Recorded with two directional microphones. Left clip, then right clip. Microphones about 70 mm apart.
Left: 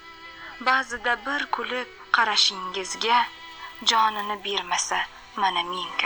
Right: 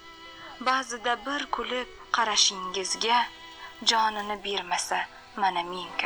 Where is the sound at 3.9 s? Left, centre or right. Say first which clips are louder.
Left 3 dB; right.